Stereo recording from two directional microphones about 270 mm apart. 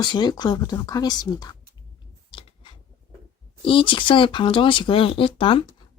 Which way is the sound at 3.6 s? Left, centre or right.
Centre.